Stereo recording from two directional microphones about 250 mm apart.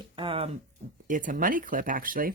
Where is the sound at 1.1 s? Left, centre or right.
Right.